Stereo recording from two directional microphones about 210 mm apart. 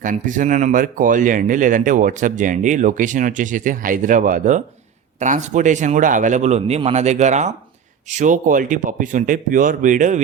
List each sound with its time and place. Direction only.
0.0 s speech: 40° right (ahead or behind)